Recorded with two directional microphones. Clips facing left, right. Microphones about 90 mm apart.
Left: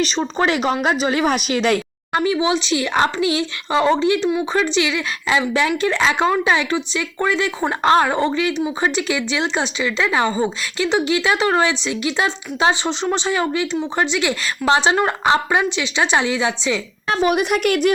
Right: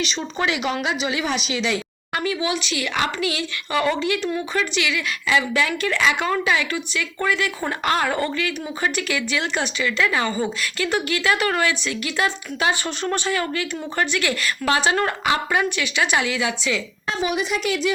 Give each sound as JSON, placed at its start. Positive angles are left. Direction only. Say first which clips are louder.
{"t": 0.0, "sound": "a woman's voice", "louder": "left 5 dB", "side_deg": 40}
{"t": 2.1, "sound": "speech", "louder": "left 6 dB", "side_deg": 25}
{"t": 17.1, "sound": "a woman's voice", "louder": "left 6 dB", "side_deg": 55}